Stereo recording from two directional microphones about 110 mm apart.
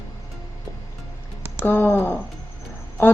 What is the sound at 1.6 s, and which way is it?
Speech, 20° left (ahead or behind).